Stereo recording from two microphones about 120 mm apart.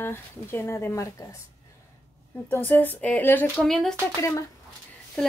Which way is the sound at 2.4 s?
15° left (ahead or behind).